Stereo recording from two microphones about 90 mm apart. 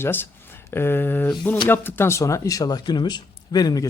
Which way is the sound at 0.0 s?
25° left (ahead or behind).